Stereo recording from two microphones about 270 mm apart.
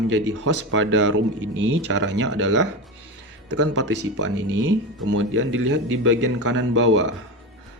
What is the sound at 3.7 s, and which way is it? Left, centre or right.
Speech, right.